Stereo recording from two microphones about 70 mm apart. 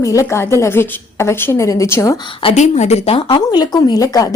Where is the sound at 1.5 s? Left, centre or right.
Left.